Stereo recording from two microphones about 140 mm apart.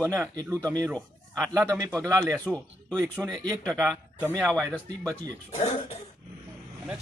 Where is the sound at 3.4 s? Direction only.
25° right (ahead or behind).